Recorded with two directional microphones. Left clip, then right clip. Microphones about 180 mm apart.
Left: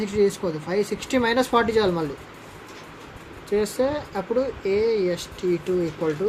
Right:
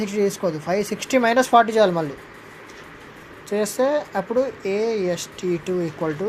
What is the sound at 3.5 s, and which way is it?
Speech, 30° right (ahead or behind).